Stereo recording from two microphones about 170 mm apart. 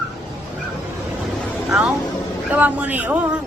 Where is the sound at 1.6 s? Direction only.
5° right (ahead or behind).